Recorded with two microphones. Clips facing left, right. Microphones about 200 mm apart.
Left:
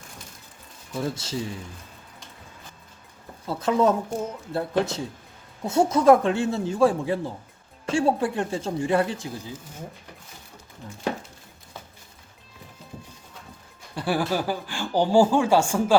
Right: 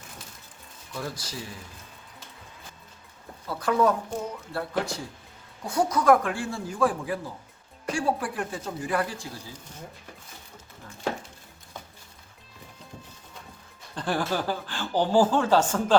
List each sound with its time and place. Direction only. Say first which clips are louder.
0.9 s speech: left 7 dB; 25° left (ahead or behind)
3.4 s speech: left 2 dB; 25° left (ahead or behind)
13.9 s speech: left 3 dB; 10° left (ahead or behind)